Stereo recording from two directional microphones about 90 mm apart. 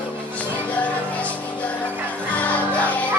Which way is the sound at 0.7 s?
15° left (ahead or behind).